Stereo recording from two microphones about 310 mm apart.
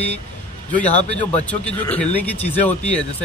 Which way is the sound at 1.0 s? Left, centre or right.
Centre.